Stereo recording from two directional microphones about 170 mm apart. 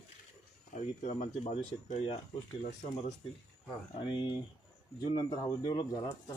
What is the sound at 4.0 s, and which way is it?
Speech, 30° left (ahead or behind).